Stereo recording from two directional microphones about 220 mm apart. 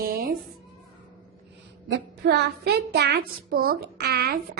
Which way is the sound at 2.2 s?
50° right (ahead or behind).